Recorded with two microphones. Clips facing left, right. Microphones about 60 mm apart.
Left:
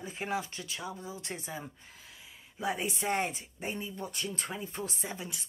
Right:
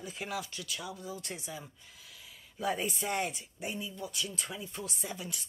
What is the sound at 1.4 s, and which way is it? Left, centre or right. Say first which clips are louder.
Speech: left 3 dB; left.